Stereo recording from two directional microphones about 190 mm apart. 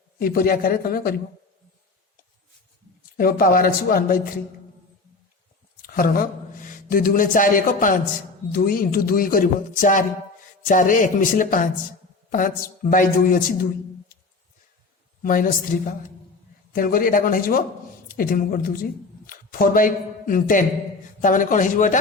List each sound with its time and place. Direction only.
0.2 s speech: 50° left (ahead or behind)
3.2 s speech: 50° left (ahead or behind)
5.8 s speech: 50° left (ahead or behind)
15.2 s speech: 45° left (ahead or behind)